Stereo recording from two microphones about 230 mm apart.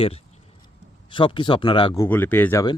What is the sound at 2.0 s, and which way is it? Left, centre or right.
Speech, centre.